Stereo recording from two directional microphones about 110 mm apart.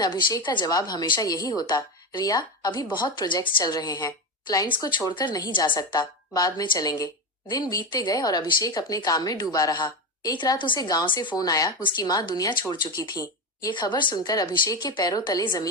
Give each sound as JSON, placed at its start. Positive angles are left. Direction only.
{"t": 0.0, "sound": "a woman's voice", "side_deg": 40}